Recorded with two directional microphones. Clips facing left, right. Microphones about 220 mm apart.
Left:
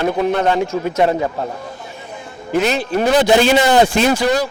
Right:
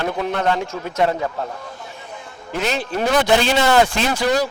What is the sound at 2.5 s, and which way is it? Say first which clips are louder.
Speech: left 6 dB; 10° left (ahead or behind).